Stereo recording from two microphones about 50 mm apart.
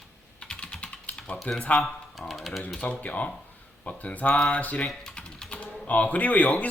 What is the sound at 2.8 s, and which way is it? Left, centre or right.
Speech, left.